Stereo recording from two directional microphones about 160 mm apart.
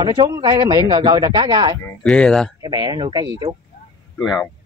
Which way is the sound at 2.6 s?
25° right (ahead or behind).